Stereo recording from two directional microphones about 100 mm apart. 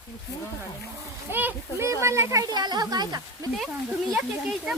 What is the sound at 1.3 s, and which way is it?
Speech, 25° right (ahead or behind).